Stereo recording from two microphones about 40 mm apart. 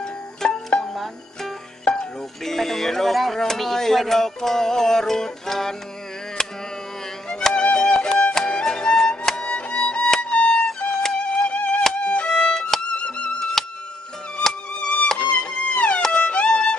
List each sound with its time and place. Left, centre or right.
0.0 s music: centre
2.4 s speech: centre
6.4 s a sound: centre
7.2 s music: centre
10.9 s music: centre
11.1 s music: left
12.3 s violin: centre
12.9 s music: left
15.1 s music: left